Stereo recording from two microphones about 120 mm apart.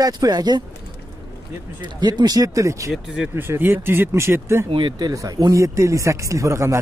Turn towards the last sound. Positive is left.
turn(degrees=-25)  # may be behind; listen again after turning